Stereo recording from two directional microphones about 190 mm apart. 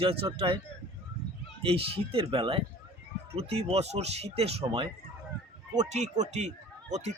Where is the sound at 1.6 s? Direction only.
30° right (ahead or behind).